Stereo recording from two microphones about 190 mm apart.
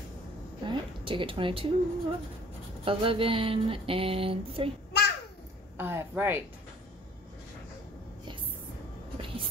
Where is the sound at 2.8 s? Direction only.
30° right (ahead or behind).